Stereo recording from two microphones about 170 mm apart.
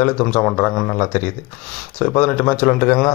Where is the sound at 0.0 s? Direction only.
10° left (ahead or behind).